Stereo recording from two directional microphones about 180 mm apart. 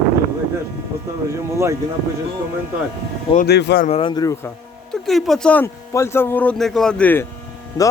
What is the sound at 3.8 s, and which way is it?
Speech, 30° left (ahead or behind).